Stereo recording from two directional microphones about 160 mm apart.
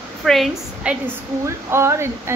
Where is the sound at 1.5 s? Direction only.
15° right (ahead or behind).